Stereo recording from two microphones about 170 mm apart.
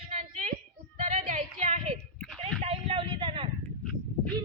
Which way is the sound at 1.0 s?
45° right (ahead or behind).